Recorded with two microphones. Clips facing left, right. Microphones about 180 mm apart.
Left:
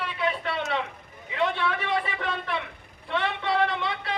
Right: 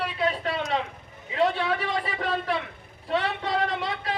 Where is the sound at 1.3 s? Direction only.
40° right (ahead or behind).